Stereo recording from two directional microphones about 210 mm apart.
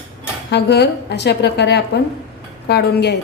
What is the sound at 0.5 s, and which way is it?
A woman's voice, 50° left (ahead or behind).